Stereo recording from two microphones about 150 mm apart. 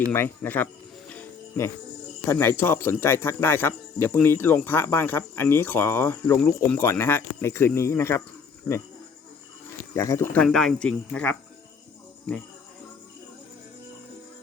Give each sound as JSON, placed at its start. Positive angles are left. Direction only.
{"t": 0.0, "sound": "cricket", "side_deg": 15}
{"t": 2.2, "sound": "speech", "side_deg": 15}
{"t": 9.9, "sound": "speech", "side_deg": 20}
{"t": 10.3, "sound": "speech", "side_deg": 5}